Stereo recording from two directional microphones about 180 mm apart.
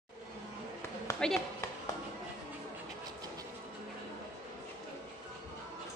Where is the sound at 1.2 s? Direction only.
5° left (ahead or behind).